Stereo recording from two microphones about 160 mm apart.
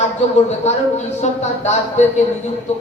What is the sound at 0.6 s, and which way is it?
Speech, 45° left (ahead or behind).